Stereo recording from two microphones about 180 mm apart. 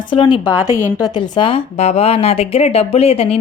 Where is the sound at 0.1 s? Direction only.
25° left (ahead or behind).